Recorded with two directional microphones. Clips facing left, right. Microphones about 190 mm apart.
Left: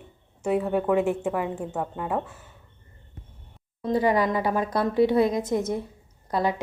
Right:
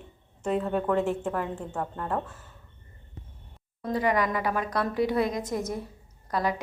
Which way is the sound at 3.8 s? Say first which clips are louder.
Left 4 dB; 30° left (ahead or behind).